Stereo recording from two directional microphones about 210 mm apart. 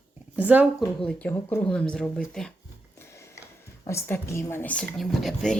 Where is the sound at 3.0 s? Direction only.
15° left (ahead or behind).